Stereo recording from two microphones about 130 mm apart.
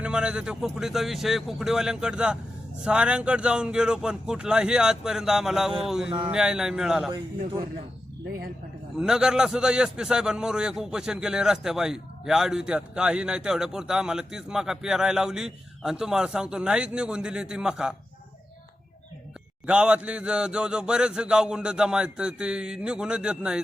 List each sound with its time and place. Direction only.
0.0 s a man's voice: 5° right (ahead or behind)
2.8 s a sound: 10° right (ahead or behind)
5.8 s a man's voice: 5° right (ahead or behind)
6.1 s speech: 40° right (ahead or behind)
6.3 s a man's voice: 5° right (ahead or behind)
9.0 s a man's voice: 5° right (ahead or behind)
19.6 s a sound: 10° right (ahead or behind)